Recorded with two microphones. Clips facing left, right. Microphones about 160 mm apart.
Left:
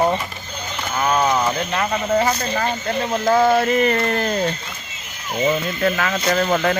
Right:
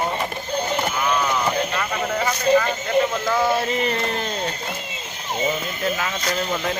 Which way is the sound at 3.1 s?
40° left (ahead or behind).